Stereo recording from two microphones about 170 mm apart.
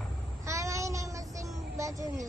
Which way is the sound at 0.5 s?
20° right (ahead or behind).